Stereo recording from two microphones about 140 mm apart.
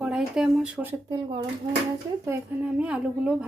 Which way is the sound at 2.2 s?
15° right (ahead or behind).